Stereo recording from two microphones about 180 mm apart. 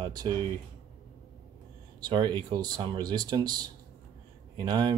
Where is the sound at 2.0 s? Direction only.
25° right (ahead or behind).